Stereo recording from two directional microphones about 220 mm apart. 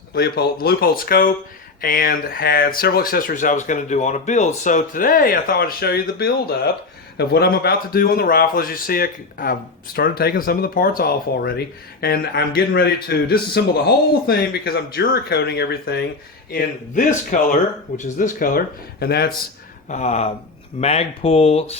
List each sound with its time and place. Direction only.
0.1 s a man's voice: 45° left (ahead or behind)
19.9 s speech: 30° left (ahead or behind)